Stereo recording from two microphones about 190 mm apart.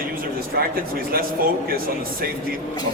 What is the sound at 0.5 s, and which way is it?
Speech, 50° right (ahead or behind).